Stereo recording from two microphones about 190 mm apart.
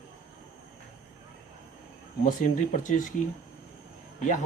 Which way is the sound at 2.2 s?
45° left (ahead or behind).